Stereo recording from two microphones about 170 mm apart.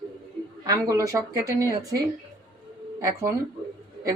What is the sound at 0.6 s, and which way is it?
A man's voice, 20° right (ahead or behind).